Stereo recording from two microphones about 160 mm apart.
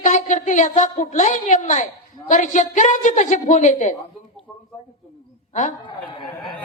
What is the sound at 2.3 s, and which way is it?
A woman's voice, 50° left (ahead or behind).